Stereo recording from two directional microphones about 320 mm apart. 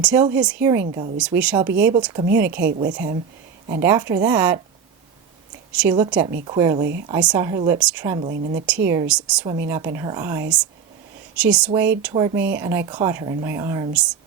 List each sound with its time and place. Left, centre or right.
0.0 s a woman's voice: centre
2.5 s a woman's voice: right
3.7 s speech: centre
5.8 s a woman's voice: centre
8.3 s a woman's voice: right
8.6 s a woman's voice: centre